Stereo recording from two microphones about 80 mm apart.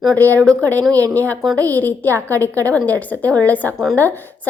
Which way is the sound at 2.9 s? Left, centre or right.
Centre.